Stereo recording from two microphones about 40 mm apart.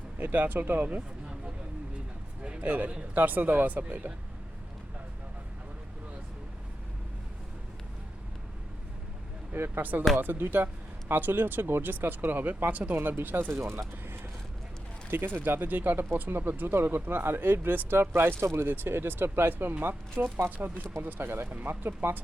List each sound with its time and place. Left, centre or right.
0.2 s speech: right
2.6 s speech: right
9.5 s speech: right
13.6 s speech: right
15.1 s speech: right
21.5 s speech: right